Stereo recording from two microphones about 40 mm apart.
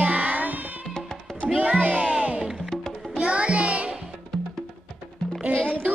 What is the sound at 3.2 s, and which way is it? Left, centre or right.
Music, right.